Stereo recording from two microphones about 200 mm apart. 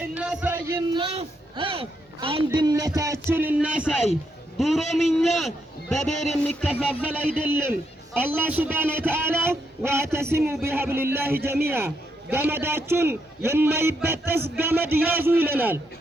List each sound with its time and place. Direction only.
0.2 s music: 5° right (ahead or behind)
0.9 s a man's voice: 25° right (ahead or behind); by 6.8 s centre (ahead or behind)
6.8 s music: 10° left (ahead or behind)
7.4 s a man's voice: 10° right (ahead or behind)